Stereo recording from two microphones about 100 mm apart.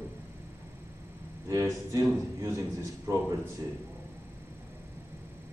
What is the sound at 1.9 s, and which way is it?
A man's voice, 35° right (ahead or behind).